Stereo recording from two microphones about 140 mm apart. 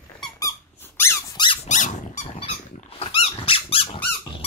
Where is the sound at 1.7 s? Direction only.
60° left (ahead or behind).